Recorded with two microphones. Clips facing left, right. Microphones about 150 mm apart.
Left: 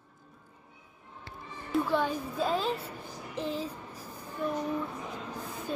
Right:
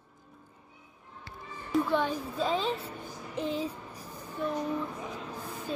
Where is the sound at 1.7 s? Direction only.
5° left (ahead or behind).